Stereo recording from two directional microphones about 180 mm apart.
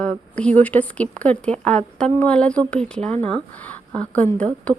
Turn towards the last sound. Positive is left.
turn(degrees=5)  # may be behind; listen again after turning